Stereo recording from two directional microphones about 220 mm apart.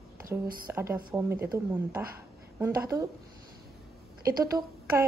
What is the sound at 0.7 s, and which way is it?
Speech, 10° right (ahead or behind).